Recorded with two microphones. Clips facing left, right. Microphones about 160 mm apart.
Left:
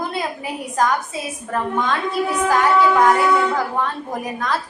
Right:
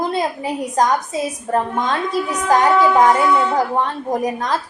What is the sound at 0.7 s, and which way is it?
A woman's voice, 40° right (ahead or behind).